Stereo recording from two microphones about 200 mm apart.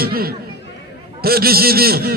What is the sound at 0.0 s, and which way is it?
Chatter, 50° right (ahead or behind).